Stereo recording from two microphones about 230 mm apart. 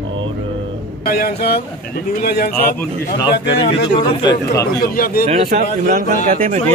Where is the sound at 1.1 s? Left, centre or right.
Left.